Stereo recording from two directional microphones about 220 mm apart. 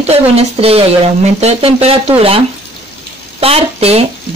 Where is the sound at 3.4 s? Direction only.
25° right (ahead or behind).